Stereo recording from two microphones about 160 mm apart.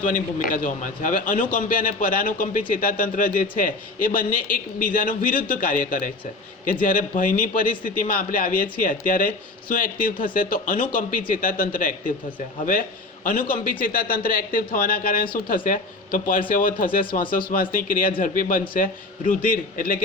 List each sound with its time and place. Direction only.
0.0 s a man's voice: 60° left (ahead or behind)
7.2 s a man's voice: 60° left (ahead or behind)
13.2 s a man's voice: 60° left (ahead or behind)